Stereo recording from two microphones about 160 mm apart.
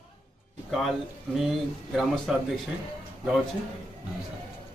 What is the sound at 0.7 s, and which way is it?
Speech, centre (ahead or behind).